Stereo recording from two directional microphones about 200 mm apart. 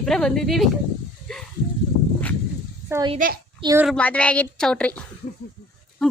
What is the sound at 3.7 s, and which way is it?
A woman's voice, centre (ahead or behind).